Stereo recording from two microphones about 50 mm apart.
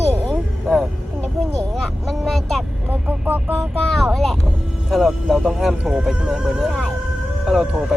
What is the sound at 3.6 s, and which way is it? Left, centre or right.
Speech, centre.